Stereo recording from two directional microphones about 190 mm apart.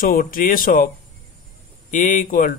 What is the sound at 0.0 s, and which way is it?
Speech, 50° left (ahead or behind).